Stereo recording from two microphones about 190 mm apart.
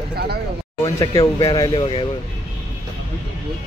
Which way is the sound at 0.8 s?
20° left (ahead or behind).